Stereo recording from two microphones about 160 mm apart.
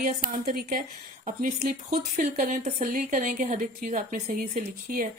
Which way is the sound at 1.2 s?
55° right (ahead or behind).